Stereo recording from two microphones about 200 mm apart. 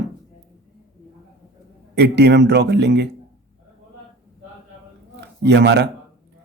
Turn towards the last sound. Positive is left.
turn(degrees=-60)  # may be behind; listen again after turning